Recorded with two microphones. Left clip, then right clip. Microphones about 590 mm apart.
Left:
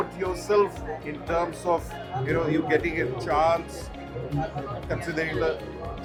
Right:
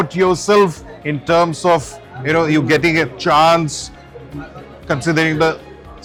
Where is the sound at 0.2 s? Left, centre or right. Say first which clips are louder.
Right 11 dB; right.